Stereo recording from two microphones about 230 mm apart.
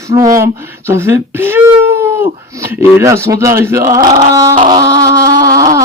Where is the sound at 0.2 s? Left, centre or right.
Centre.